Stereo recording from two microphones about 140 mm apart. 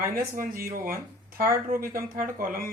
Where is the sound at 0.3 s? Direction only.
90° right.